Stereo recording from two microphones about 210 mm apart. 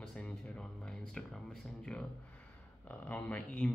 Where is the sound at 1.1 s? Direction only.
5° left (ahead or behind).